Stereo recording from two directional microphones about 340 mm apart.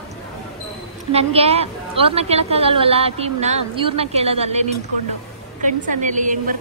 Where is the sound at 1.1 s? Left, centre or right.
Centre.